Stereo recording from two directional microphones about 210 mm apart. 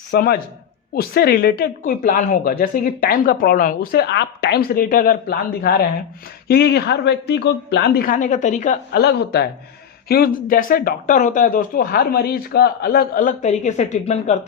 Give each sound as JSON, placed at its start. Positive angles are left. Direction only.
{"t": 0.1, "sound": "a man's voice", "side_deg": 45}